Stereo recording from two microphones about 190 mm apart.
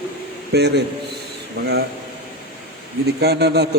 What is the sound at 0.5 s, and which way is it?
Speech, 60° right (ahead or behind).